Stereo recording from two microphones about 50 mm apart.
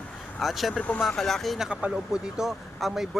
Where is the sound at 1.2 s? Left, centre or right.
Centre.